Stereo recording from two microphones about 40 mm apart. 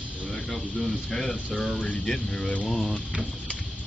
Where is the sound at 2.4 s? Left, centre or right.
Left.